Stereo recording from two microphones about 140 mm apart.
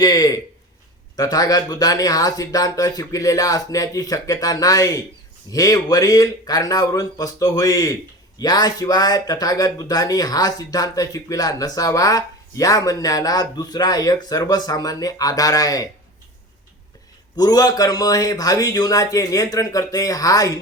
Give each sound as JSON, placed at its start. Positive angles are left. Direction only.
{"t": 0.0, "sound": "speech", "side_deg": 25}
{"t": 17.3, "sound": "speech", "side_deg": 25}